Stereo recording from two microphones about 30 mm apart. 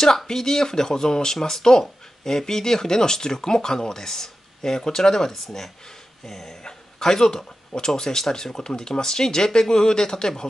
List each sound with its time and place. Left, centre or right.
0.3 s speech: centre
6.6 s speech: left